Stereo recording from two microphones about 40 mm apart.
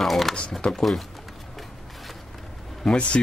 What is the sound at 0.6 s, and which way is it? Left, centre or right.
Speech, centre.